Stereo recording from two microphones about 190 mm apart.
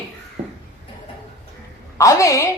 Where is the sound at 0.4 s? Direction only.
35° right (ahead or behind).